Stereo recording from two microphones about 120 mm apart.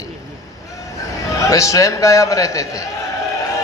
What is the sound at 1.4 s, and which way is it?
A man's voice, 30° left (ahead or behind).